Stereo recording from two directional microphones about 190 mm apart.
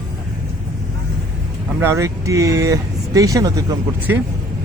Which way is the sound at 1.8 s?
15° right (ahead or behind).